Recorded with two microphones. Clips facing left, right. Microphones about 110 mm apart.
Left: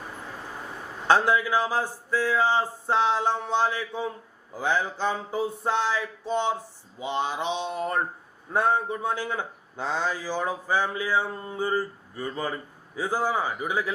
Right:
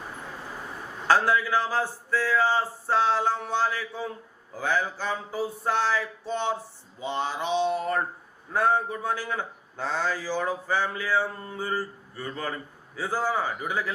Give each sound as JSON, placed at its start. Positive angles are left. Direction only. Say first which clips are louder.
{"t": 1.0, "sound": "a man's voice", "louder": "left 1 dB", "side_deg": 20}